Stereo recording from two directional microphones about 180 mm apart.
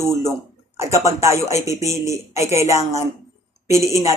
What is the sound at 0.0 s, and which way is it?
Speech, 15° right (ahead or behind).